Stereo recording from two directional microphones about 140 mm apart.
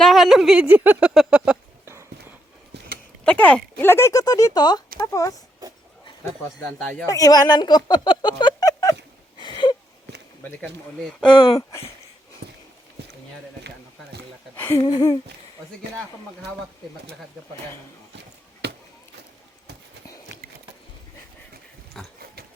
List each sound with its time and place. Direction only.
0.0 s speech: centre (ahead or behind)
1.8 s a sound: 20° right (ahead or behind)
3.2 s speech: 10° left (ahead or behind)
7.0 s speech: 25° left (ahead or behind)
9.4 s a sound: 35° left (ahead or behind)
11.3 s speech: 40° left (ahead or behind)
14.5 s speech: 15° left (ahead or behind)
14.8 s speech: 30° left (ahead or behind)
22.0 s pig: 5° left (ahead or behind)